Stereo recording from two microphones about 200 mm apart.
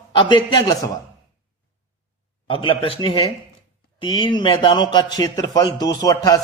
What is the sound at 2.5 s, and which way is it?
A man's voice, 25° left (ahead or behind).